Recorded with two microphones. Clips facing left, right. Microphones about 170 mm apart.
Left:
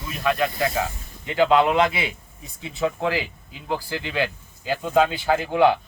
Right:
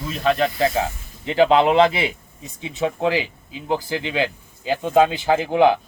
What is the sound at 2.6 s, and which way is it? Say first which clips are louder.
Speech: right 3 dB; 20° right (ahead or behind).